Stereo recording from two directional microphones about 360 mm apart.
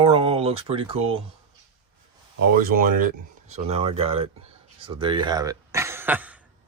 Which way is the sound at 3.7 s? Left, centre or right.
Centre.